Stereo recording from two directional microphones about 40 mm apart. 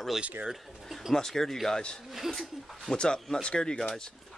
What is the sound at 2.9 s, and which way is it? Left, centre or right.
Speech, centre.